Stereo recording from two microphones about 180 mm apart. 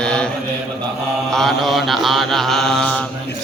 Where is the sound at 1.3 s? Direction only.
Centre (ahead or behind).